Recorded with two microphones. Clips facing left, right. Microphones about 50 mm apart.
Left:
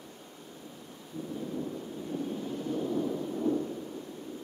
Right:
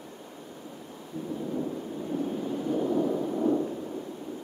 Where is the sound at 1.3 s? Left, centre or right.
Right.